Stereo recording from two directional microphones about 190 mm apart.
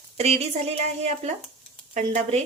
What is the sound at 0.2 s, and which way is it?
Speech, 35° right (ahead or behind).